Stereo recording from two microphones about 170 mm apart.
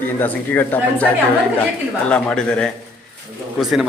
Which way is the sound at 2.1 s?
5° left (ahead or behind).